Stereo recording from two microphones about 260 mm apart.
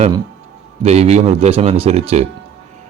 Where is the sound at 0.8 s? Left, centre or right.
Right.